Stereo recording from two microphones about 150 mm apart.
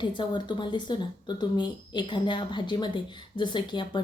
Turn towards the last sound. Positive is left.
turn(degrees=30)  # may be behind; listen again after turning